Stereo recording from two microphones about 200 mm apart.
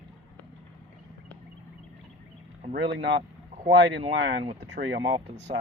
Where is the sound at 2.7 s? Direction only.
60° right (ahead or behind).